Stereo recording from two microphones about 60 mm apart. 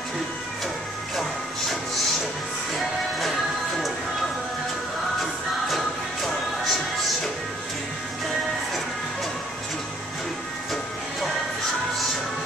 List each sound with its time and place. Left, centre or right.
6.2 s music: centre